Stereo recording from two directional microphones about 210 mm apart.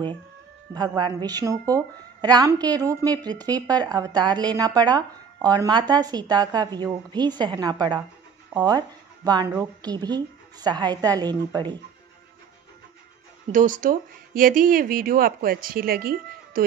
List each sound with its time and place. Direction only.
0.7 s a woman's voice: 20° right (ahead or behind)
13.5 s speech: 40° right (ahead or behind)